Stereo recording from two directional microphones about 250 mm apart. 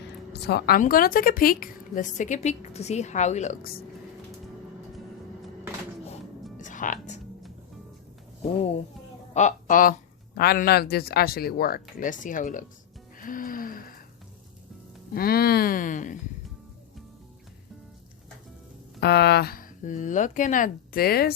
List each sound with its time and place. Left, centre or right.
0.3 s speech: left
6.6 s music: left
9.3 s speech: left
13.1 s gasp: left
15.1 s speech: left
18.9 s speech: left